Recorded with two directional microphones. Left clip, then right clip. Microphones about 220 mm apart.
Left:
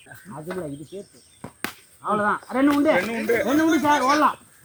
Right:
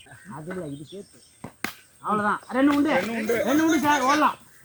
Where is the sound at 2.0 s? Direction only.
5° right (ahead or behind).